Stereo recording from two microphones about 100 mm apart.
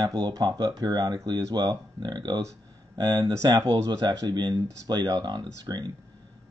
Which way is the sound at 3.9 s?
40° right (ahead or behind).